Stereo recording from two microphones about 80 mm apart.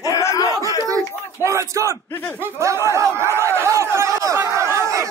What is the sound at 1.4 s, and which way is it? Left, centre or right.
Crowd, right.